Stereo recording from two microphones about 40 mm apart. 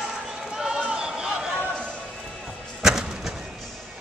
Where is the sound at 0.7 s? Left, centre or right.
Right.